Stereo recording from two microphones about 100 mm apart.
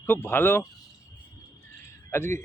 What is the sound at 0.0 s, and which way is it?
Speech, 20° left (ahead or behind).